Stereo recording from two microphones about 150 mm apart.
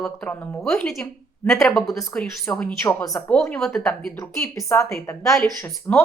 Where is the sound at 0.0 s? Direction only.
10° left (ahead or behind).